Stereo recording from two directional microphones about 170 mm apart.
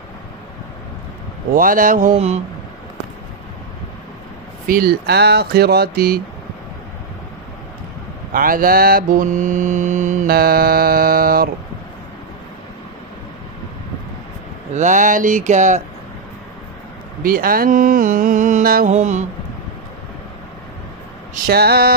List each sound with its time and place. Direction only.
1.5 s mantra: 55° right (ahead or behind)
4.6 s speech: 60° right (ahead or behind)
8.3 s mantra: 55° right (ahead or behind)
14.7 s mantra: 45° right (ahead or behind)
17.2 s mantra: 60° right (ahead or behind)
18.9 s mantra: 45° right (ahead or behind)
21.5 s mantra: 65° right (ahead or behind)